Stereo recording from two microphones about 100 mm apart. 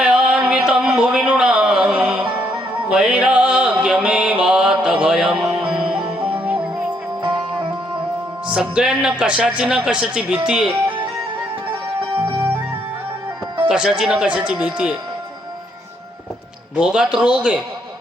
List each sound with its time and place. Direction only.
0.0 s a sound: 10° right (ahead or behind)
2.7 s music: 10° right (ahead or behind)
7.2 s music: 60° right (ahead or behind)
8.4 s speech: 10° right (ahead or behind)
12.1 s music: 55° right (ahead or behind)
13.7 s speech: 10° right (ahead or behind)
16.7 s speech: 10° right (ahead or behind)